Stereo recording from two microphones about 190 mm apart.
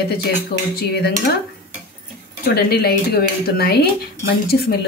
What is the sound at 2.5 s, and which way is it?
Speech, 55° left (ahead or behind).